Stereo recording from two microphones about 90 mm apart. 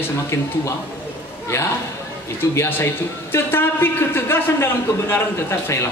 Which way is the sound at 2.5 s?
30° left (ahead or behind).